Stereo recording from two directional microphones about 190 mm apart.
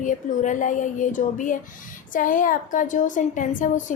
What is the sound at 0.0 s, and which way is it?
A woman's voice, 40° left (ahead or behind).